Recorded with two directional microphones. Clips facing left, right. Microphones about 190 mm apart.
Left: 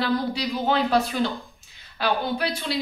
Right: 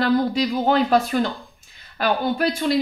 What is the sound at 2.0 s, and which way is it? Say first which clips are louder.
Speech: right 4 dB; 50° right (ahead or behind).